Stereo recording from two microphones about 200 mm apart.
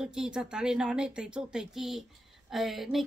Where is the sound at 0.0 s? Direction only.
5° right (ahead or behind).